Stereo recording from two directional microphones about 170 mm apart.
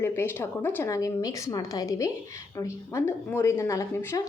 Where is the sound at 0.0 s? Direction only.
15° left (ahead or behind).